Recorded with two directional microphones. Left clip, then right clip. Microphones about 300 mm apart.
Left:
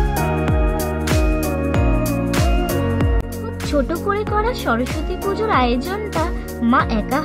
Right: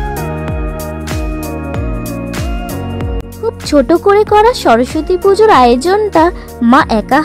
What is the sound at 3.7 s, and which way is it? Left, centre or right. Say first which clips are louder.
Speech: right 12 dB; right.